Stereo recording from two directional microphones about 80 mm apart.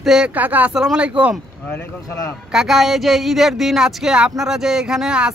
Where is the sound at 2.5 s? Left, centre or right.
Centre.